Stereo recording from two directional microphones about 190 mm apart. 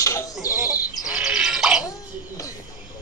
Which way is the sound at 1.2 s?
5° right (ahead or behind).